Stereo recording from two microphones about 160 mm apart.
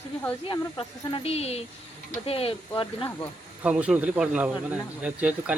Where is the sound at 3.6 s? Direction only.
10° right (ahead or behind).